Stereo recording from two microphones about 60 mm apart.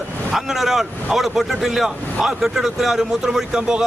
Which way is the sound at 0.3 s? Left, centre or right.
Centre.